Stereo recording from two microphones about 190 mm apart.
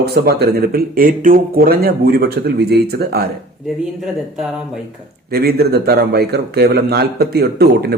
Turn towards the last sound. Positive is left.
turn(degrees=-55)  # may be behind; listen again after turning